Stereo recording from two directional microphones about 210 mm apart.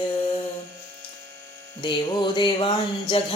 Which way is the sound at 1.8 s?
20° left (ahead or behind).